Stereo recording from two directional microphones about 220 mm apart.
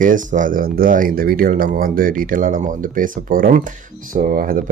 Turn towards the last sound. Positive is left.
turn(degrees=-40)  # may be behind; listen again after turning